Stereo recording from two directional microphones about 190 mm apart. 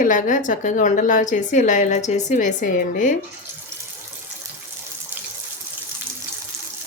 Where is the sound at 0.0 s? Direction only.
45° left (ahead or behind).